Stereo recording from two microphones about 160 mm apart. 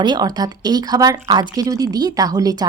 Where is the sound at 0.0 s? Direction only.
25° right (ahead or behind).